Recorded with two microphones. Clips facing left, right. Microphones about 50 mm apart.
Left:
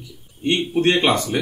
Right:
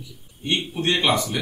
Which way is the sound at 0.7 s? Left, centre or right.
Left.